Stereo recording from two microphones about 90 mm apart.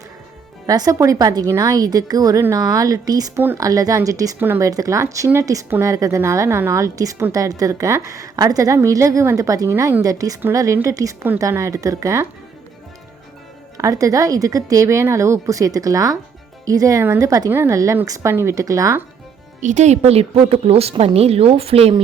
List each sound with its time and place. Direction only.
0.7 s a woman's voice: 45° right (ahead or behind)
4.4 s speech: 25° right (ahead or behind)
4.6 s a woman's voice: 40° right (ahead or behind)
13.7 s a woman's voice: 40° right (ahead or behind)
17.5 s a woman's voice: 25° right (ahead or behind)
20.3 s a woman's voice: 90° right